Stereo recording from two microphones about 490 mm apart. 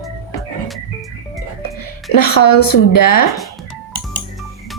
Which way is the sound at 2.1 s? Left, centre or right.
Left.